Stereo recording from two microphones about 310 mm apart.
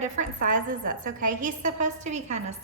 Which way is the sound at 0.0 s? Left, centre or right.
Right.